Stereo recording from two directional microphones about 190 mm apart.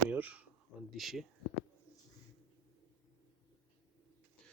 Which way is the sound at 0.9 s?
Centre (ahead or behind).